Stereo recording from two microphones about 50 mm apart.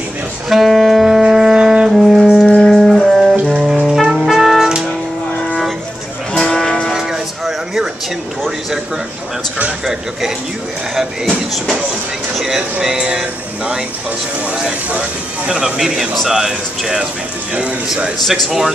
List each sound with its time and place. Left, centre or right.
0.5 s music: centre
2.0 s music: centre
6.3 s music: centre
6.9 s music: centre
12.4 s speech: centre; by 15.5 s right
15.5 s speech: centre
18.2 s speech: centre